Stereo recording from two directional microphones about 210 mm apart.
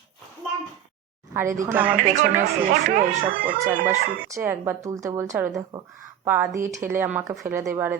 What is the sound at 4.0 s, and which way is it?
Speech, 50° right (ahead or behind).